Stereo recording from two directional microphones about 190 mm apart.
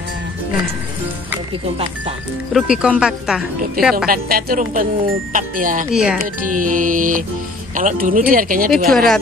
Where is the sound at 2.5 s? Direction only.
5° right (ahead or behind).